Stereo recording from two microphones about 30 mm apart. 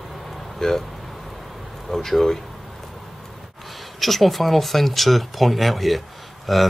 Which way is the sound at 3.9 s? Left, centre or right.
Centre.